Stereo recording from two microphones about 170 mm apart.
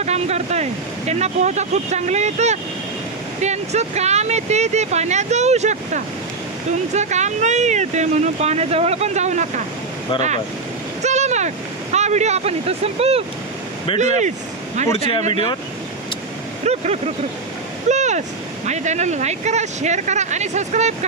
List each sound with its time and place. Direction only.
0.0 s speech: 40° right (ahead or behind)
16.6 s speech: 40° right (ahead or behind)
17.8 s vehicle: 45° right (ahead or behind)
18.6 s speech: 45° right (ahead or behind)